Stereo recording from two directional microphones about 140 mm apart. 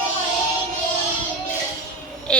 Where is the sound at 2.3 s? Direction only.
5° left (ahead or behind).